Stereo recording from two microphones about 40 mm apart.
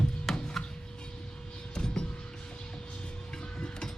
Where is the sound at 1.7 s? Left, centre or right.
Centre.